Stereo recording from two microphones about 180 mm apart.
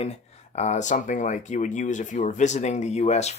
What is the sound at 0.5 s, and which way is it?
Speech, 40° left (ahead or behind).